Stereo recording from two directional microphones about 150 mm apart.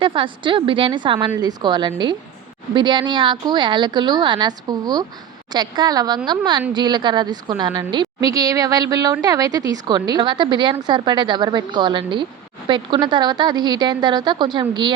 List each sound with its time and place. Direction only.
0.0 s a woman's voice: 35° right (ahead or behind)